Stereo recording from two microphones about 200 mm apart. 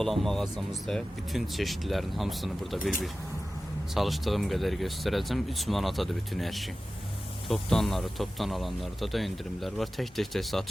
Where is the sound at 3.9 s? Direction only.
Centre (ahead or behind).